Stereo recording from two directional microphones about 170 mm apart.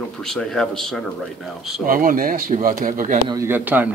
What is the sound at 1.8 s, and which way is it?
Speech, 55° right (ahead or behind).